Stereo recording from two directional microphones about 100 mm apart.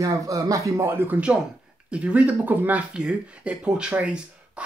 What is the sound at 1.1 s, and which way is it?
Speech, 10° right (ahead or behind).